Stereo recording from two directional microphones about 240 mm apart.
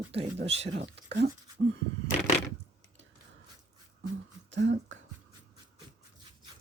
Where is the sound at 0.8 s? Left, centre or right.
Right.